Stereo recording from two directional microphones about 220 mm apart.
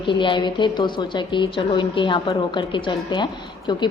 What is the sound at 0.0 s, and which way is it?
A woman's voice, 20° left (ahead or behind).